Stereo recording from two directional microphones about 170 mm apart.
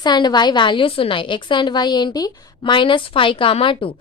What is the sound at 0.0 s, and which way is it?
A woman's voice, 25° left (ahead or behind).